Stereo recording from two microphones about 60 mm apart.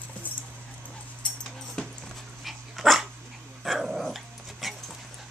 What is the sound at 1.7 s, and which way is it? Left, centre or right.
Dog, centre.